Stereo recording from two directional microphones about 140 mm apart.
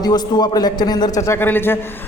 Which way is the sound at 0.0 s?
30° left (ahead or behind).